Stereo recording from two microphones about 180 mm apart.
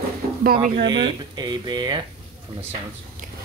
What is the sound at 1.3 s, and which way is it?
Speech, 25° right (ahead or behind).